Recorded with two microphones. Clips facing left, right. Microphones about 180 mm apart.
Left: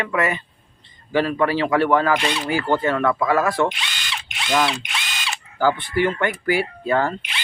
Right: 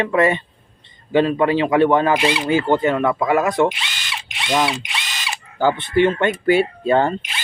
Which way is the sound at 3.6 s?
5° right (ahead or behind).